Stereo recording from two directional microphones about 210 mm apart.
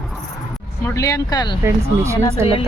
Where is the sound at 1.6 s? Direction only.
15° right (ahead or behind).